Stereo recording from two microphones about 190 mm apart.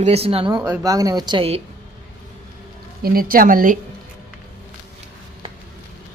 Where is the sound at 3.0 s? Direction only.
50° right (ahead or behind).